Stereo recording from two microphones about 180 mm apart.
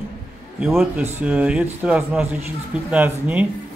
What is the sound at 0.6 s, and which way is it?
Speech, 5° right (ahead or behind).